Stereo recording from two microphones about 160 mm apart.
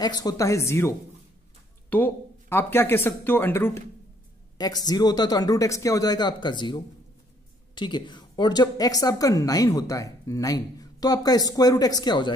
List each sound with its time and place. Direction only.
0.0 s a woman's voice: 25° left (ahead or behind)
4.6 s a woman's voice: 25° left (ahead or behind)